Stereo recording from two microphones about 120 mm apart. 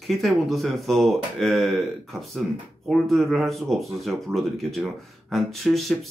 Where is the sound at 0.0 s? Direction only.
Centre (ahead or behind).